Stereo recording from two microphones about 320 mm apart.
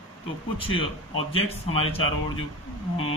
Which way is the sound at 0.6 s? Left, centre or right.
Centre.